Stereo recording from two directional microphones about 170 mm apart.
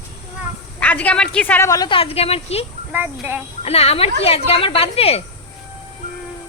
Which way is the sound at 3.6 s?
35° left (ahead or behind).